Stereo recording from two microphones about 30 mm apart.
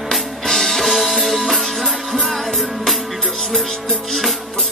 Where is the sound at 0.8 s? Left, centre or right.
Centre.